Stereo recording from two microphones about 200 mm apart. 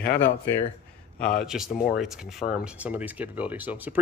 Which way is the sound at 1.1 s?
5° left (ahead or behind).